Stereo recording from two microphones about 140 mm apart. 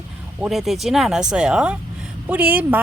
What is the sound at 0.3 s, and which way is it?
Speech, 5° right (ahead or behind).